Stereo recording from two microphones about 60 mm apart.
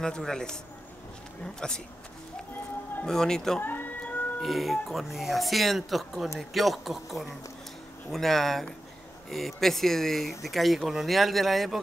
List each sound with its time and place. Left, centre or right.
0.0 s a man's voice: centre
3.1 s a man's voice: centre
3.6 s cat: left
4.4 s speech: centre